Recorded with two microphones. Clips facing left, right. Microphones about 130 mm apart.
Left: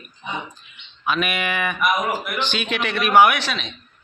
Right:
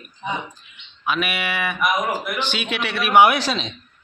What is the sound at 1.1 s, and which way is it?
A man's voice, 5° right (ahead or behind).